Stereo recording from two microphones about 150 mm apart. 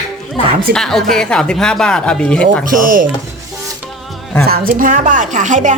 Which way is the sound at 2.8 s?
65° right (ahead or behind).